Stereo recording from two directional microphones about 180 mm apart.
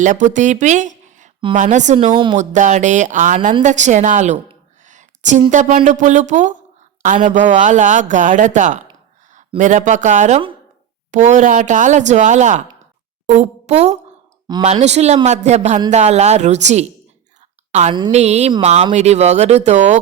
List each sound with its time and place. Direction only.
0.0 s speech: 45° right (ahead or behind)
2.1 s speech: 25° right (ahead or behind)
2.4 s speech: 45° right (ahead or behind)
4.9 s a sound: 40° right (ahead or behind)
5.5 s a woman's voice: 45° right (ahead or behind)
17.7 s a sound: 40° right (ahead or behind)
18.1 s speech: 40° right (ahead or behind)